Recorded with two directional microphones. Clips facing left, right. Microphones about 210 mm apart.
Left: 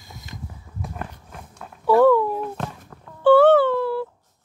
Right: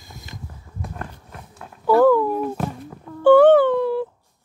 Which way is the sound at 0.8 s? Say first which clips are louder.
Even; centre (ahead or behind).